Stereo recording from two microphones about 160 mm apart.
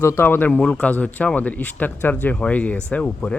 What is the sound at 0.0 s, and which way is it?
Speech, 15° left (ahead or behind).